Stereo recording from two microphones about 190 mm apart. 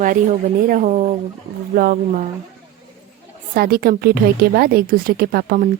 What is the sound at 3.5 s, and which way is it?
A woman's voice, 50° right (ahead or behind).